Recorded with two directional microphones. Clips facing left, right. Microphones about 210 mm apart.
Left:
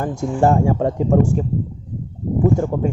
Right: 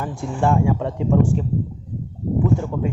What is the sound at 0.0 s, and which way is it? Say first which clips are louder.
Speech: left 5 dB; 40° left (ahead or behind).